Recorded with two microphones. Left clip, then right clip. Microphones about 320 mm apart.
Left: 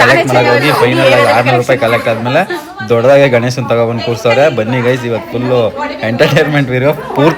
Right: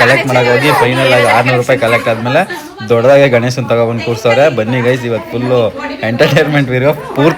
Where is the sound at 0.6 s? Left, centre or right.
Centre.